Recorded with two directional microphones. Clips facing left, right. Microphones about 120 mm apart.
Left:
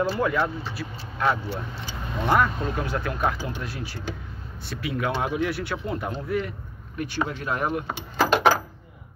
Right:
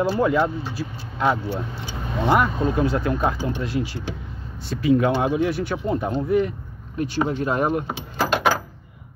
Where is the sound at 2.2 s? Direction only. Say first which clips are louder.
Right 3 dB; 20° right (ahead or behind).